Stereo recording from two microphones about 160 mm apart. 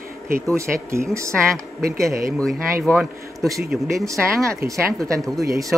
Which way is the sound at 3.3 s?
20° right (ahead or behind).